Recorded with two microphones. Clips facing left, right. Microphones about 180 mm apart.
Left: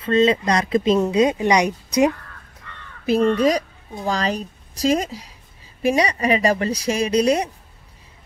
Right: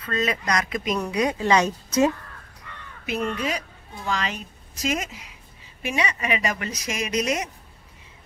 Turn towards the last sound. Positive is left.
turn(degrees=30)  # may be behind; listen again after turning